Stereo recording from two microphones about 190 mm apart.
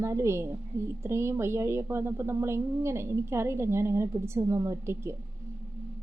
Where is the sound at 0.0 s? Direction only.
15° right (ahead or behind).